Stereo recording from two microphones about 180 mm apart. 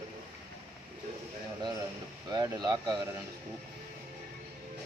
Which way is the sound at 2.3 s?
25° right (ahead or behind).